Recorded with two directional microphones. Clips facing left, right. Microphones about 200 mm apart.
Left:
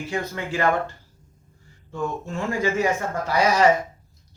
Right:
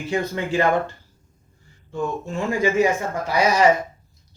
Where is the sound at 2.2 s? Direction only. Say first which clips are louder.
Right 4 dB; 15° right (ahead or behind).